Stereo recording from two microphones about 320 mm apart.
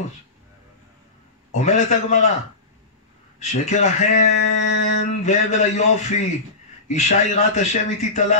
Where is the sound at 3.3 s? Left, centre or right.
Left.